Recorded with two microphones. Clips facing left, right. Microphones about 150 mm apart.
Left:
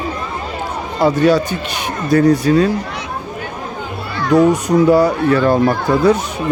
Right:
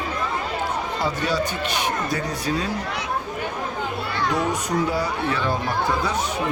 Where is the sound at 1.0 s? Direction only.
65° left (ahead or behind).